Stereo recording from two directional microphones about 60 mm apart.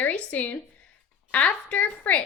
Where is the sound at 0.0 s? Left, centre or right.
Left.